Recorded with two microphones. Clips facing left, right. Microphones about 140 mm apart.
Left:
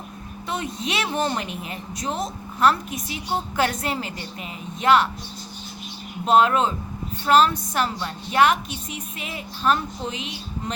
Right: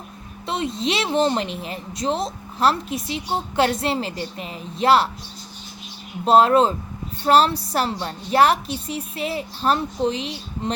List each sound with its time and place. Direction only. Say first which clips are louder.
0.4 s a woman's voice: right 4 dB; 25° right (ahead or behind)
6.2 s a woman's voice: right 3 dB; 35° right (ahead or behind)